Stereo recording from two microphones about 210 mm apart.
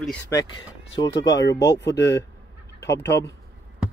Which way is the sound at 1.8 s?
55° left (ahead or behind).